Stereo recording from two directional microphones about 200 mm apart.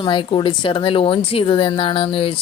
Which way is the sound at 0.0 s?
25° left (ahead or behind).